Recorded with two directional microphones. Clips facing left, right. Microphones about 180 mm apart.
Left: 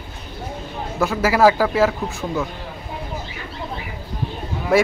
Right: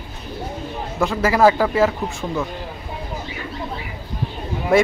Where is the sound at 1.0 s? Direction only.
5° left (ahead or behind).